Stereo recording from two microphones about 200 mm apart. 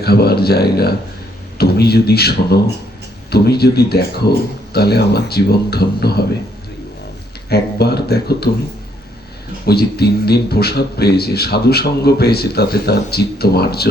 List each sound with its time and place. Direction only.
0.0 s speech: 50° left (ahead or behind)
7.5 s speech: 55° left (ahead or behind)
9.6 s speech: 55° left (ahead or behind)